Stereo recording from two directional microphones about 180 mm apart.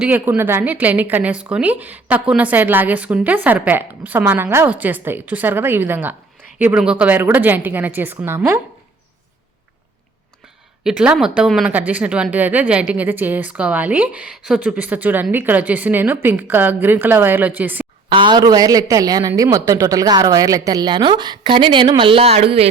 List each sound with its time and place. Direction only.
0.0 s speech: 10° right (ahead or behind)
10.8 s speech: 5° right (ahead or behind)
18.1 s a woman's voice: 25° right (ahead or behind)